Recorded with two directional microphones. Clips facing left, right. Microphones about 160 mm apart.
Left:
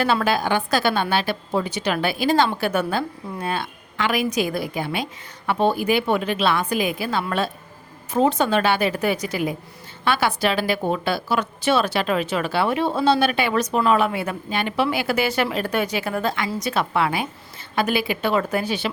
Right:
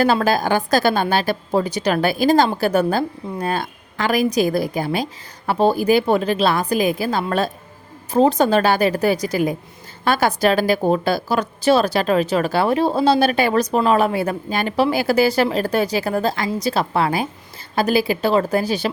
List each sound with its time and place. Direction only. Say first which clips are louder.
0.0 s a woman's voice: right 4 dB; 40° right (ahead or behind)